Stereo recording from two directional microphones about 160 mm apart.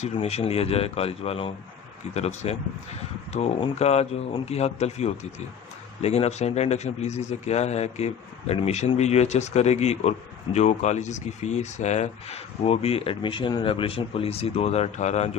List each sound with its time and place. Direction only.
0.0 s speech: 40° left (ahead or behind)